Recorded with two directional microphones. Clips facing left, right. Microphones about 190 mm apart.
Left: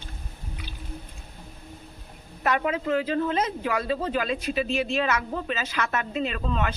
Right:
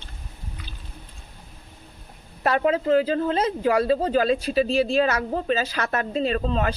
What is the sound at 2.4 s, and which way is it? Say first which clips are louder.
Speech: right 4 dB; 30° right (ahead or behind).